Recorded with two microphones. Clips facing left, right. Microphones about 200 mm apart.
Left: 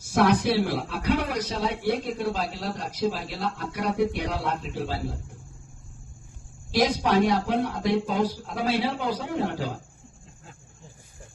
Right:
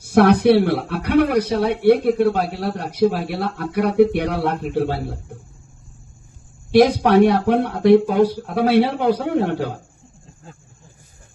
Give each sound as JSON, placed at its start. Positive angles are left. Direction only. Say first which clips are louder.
{"t": 0.0, "sound": "a man's voice", "louder": "right 8 dB", "side_deg": -65}
{"t": 6.7, "sound": "a man's voice", "louder": "right 9 dB", "side_deg": -60}